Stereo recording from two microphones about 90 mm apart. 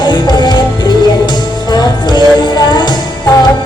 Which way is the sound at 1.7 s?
50° left (ahead or behind).